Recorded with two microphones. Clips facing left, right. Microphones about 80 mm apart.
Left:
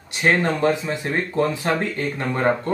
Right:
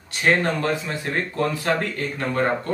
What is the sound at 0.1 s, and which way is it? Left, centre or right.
Speech, left.